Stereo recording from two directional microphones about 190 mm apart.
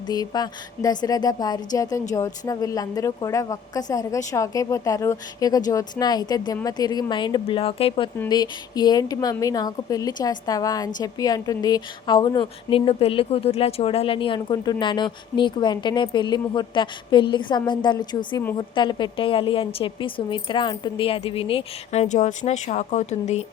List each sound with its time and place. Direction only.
0.1 s a woman's voice: 20° left (ahead or behind)